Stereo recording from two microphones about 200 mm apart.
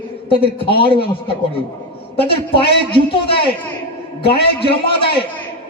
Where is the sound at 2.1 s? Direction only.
30° left (ahead or behind).